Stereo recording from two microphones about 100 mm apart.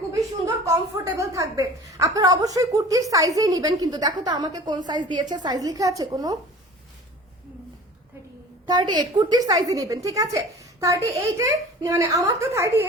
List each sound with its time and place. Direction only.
0.4 s a woman's voice: 35° right (ahead or behind)
8.6 s a woman's voice: 45° right (ahead or behind); by 12.9 s 30° right (ahead or behind)